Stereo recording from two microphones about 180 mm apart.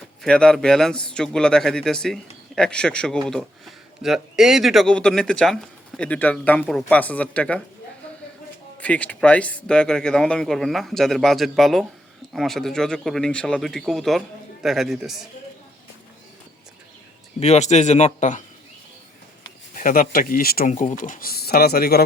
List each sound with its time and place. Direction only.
0.2 s speech: 5° left (ahead or behind)
8.8 s speech: 10° left (ahead or behind)
17.4 s a man's voice: 40° left (ahead or behind)
19.7 s speech: 50° left (ahead or behind)